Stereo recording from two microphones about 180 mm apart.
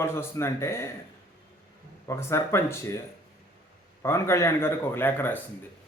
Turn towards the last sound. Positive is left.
turn(degrees=10)  # may be behind; listen again after turning